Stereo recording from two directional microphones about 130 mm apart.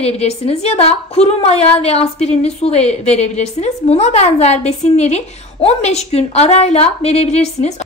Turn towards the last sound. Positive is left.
turn(degrees=60)  # may be behind; listen again after turning